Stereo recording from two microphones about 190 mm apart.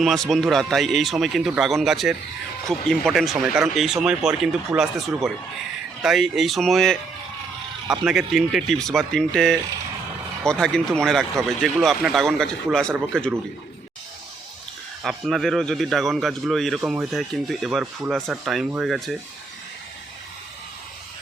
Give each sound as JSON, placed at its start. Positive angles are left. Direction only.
{"t": 0.0, "sound": "a man's voice", "side_deg": 0}
{"t": 8.0, "sound": "a man's voice", "side_deg": 0}
{"t": 15.0, "sound": "a man's voice", "side_deg": 0}